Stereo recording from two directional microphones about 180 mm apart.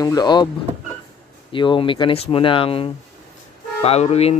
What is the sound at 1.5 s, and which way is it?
Speech, 25° left (ahead or behind).